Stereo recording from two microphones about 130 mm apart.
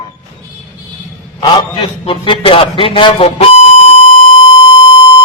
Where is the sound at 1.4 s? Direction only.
40° left (ahead or behind).